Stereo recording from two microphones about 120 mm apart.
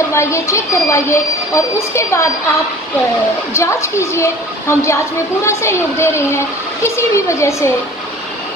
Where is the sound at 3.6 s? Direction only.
25° left (ahead or behind).